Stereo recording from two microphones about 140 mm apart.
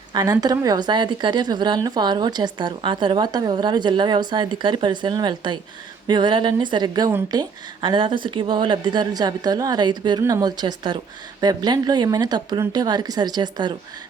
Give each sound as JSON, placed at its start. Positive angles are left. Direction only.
{"t": 0.1, "sound": "a woman's voice", "side_deg": -30}